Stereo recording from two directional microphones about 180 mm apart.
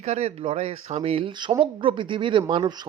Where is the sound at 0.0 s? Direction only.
35° right (ahead or behind).